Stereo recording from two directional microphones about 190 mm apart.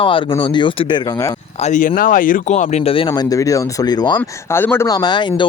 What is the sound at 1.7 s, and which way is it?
Speech, 45° left (ahead or behind).